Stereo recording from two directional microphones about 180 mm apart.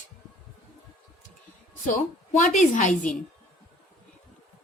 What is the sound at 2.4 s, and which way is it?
Speech, 45° left (ahead or behind).